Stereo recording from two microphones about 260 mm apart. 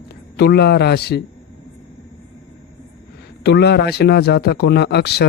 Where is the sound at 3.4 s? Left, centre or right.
Left.